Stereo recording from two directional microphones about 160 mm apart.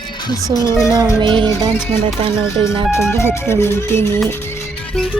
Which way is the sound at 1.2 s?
30° right (ahead or behind).